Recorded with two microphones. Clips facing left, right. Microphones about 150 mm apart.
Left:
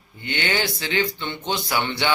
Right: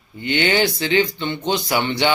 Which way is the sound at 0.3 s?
20° right (ahead or behind).